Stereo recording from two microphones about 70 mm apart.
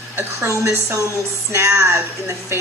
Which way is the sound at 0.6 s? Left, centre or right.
Right.